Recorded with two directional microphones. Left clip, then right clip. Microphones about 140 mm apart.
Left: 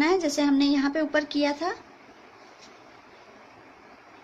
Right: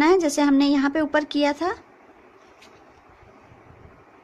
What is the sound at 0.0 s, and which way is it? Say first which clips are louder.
A woman's voice: right 5 dB; 35° right (ahead or behind).